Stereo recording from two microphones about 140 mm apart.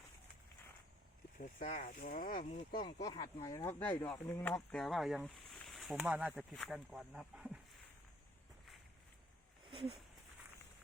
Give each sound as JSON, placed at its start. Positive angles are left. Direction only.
{"t": 1.7, "sound": "speech", "side_deg": 55}
{"t": 2.7, "sound": "speech", "side_deg": 30}
{"t": 4.7, "sound": "speech", "side_deg": 0}
{"t": 9.6, "sound": "a sound", "side_deg": -40}